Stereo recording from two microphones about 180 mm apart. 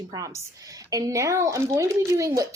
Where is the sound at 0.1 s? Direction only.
20° right (ahead or behind).